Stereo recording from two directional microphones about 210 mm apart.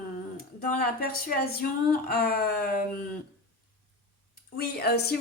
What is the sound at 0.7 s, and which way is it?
A woman's voice, 45° left (ahead or behind).